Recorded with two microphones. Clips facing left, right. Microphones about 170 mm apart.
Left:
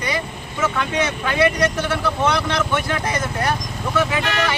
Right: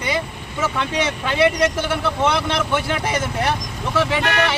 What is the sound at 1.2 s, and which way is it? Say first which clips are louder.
Speech: right 2 dB; 25° right (ahead or behind).